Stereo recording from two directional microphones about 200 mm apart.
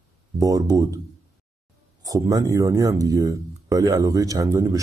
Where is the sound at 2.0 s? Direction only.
20° right (ahead or behind).